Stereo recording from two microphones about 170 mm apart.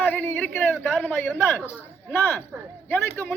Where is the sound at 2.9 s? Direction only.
10° left (ahead or behind).